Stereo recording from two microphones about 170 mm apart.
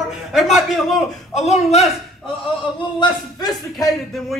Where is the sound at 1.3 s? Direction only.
40° left (ahead or behind).